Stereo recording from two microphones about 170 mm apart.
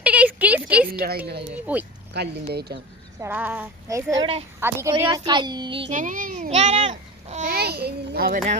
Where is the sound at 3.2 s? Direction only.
10° right (ahead or behind); by 5.9 s 30° right (ahead or behind).